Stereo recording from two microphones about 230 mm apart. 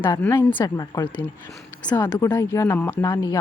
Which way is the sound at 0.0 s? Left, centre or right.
Centre.